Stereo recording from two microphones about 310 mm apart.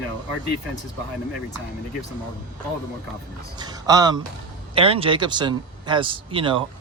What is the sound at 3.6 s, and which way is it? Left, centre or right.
Speech, centre.